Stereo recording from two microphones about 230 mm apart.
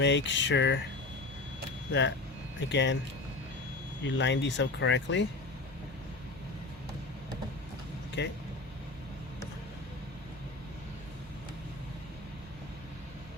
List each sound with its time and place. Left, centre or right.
0.0 s speech: left
1.9 s speech: left
4.0 s speech: left
8.2 s speech: left